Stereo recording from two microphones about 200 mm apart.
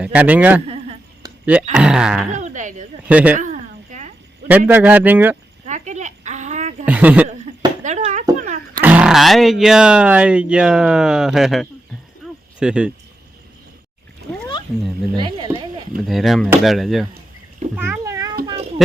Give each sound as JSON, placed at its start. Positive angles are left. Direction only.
{"t": 0.0, "sound": "speech", "side_deg": -5}
{"t": 1.2, "sound": "music", "side_deg": -20}
{"t": 1.7, "sound": "speech", "side_deg": -5}
{"t": 2.3, "sound": "a woman's voice", "side_deg": -35}
{"t": 3.1, "sound": "speech", "side_deg": -5}
{"t": 3.3, "sound": "a sound", "side_deg": -40}
{"t": 4.4, "sound": "speech", "side_deg": -10}
{"t": 5.6, "sound": "a sound", "side_deg": -35}
{"t": 6.8, "sound": "speech", "side_deg": -10}
{"t": 7.9, "sound": "a sound", "side_deg": -35}
{"t": 8.8, "sound": "speech", "side_deg": -5}
{"t": 15.1, "sound": "speech", "side_deg": -25}
{"t": 16.0, "sound": "speech", "side_deg": 0}
{"t": 17.7, "sound": "cat", "side_deg": -10}